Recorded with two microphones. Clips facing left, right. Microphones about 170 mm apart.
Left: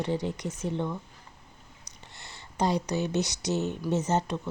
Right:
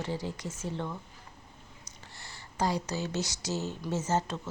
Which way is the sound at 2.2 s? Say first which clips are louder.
Left 3 dB; 20° left (ahead or behind).